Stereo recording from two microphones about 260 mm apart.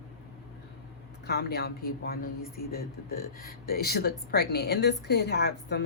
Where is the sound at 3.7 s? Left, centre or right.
Left.